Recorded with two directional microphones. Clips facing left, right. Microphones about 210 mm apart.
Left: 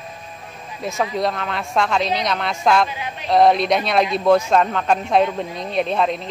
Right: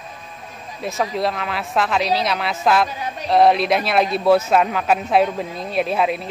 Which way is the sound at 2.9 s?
40° right (ahead or behind).